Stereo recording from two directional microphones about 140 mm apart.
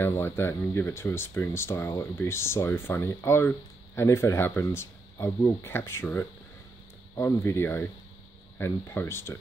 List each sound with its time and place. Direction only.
0.0 s speech: 15° left (ahead or behind)